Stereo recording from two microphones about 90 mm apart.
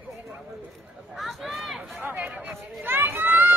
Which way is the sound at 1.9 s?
25° right (ahead or behind).